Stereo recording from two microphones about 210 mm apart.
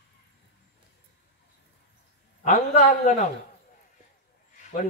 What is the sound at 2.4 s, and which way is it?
Speech, 40° left (ahead or behind).